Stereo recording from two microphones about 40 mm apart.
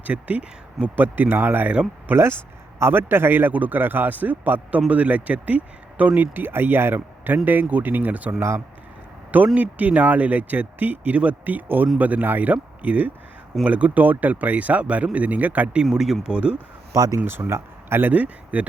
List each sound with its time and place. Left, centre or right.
0.0 s speech: right
0.9 s speech: right
2.1 s speech: right
2.8 s a man's voice: right
7.4 s speech: right
9.6 s speech: right
15.9 s speech: centre
16.2 s speech: right
17.2 s speech: right
18.0 s speech: right